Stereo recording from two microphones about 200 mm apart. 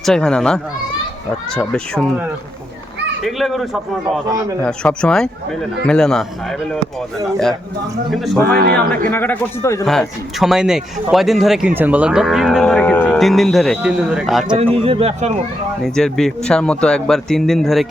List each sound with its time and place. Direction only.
0.0 s speech: 5° left (ahead or behind)
3.2 s speech: centre (ahead or behind)
8.1 s speech: centre (ahead or behind)
8.4 s speech: 50° right (ahead or behind)
9.0 s a man's voice: 10° left (ahead or behind)
10.4 s speech: 5° right (ahead or behind)
14.5 s speech: 30° right (ahead or behind)
15.8 s speech: 5° left (ahead or behind)